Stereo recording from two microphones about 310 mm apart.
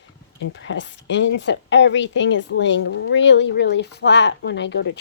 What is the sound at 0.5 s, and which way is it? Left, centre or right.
Speech, left.